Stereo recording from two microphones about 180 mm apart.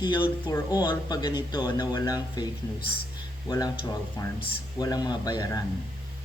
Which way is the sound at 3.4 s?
20° left (ahead or behind).